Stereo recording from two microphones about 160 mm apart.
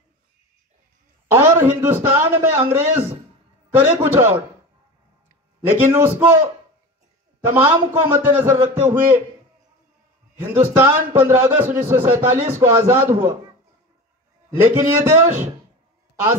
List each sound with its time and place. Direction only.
1.3 s a man's voice: 15° right (ahead or behind)
5.7 s a man's voice: 15° right (ahead or behind)
10.4 s a man's voice: 15° right (ahead or behind)
14.6 s a man's voice: 15° right (ahead or behind)